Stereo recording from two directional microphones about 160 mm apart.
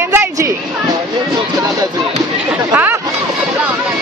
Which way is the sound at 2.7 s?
10° right (ahead or behind).